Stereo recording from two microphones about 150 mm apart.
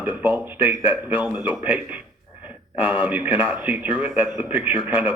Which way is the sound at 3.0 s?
10° right (ahead or behind).